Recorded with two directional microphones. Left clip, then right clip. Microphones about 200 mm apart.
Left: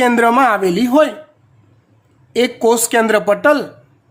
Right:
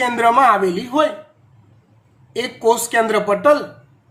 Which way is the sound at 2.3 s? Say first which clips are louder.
Left 3 dB; 55° left (ahead or behind).